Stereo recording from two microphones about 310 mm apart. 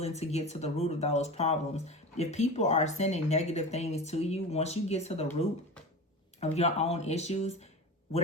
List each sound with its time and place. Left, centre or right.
0.0 s speech: left